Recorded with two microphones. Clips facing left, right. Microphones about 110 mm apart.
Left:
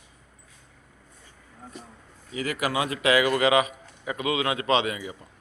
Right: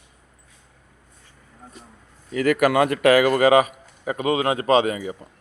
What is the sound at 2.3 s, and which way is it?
A man's voice, 55° right (ahead or behind).